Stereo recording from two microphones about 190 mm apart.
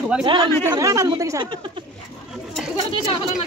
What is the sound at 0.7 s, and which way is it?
Speech, 15° right (ahead or behind).